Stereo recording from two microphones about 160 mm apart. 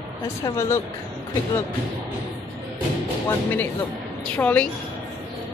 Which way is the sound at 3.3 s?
10° left (ahead or behind).